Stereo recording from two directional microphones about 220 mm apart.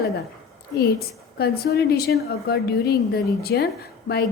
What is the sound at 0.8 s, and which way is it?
A woman's voice, 45° left (ahead or behind).